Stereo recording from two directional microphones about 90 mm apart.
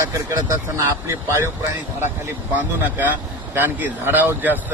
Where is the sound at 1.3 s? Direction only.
30° right (ahead or behind).